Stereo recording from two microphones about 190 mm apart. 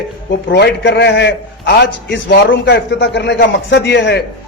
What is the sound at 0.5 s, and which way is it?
A man's voice, 65° left (ahead or behind).